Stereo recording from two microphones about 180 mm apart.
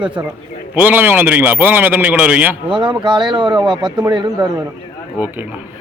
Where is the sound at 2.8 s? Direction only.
25° right (ahead or behind).